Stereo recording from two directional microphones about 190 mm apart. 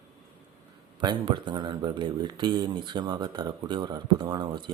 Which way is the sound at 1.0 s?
25° right (ahead or behind).